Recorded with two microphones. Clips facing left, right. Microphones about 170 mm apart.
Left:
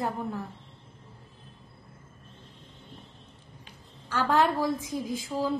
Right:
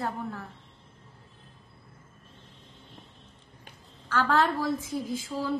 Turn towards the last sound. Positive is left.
turn(degrees=15)  # may be behind; listen again after turning